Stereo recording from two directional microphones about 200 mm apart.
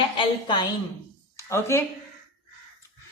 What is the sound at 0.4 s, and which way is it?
A woman's voice, 20° left (ahead or behind).